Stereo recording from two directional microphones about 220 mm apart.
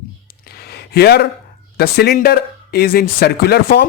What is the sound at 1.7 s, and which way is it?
A man's voice, 45° left (ahead or behind).